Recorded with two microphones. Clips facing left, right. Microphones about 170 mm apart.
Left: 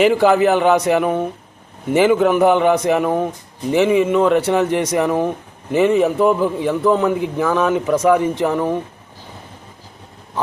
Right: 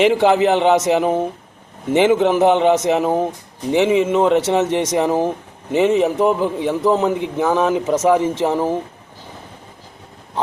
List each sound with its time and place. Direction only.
0.1 s a man's voice: 20° right (ahead or behind)